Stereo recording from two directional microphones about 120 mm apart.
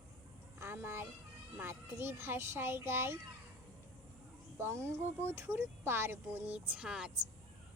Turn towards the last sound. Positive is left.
turn(degrees=-5)  # may be behind; listen again after turning